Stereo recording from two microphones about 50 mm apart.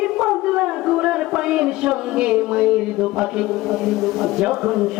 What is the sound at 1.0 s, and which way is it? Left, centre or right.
A man's voice, centre.